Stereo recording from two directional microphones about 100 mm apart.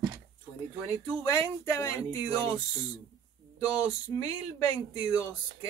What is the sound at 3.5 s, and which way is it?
Speech, 35° left (ahead or behind).